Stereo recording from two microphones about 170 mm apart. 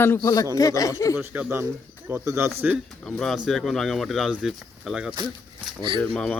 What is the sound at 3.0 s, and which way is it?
Speech, 5° left (ahead or behind).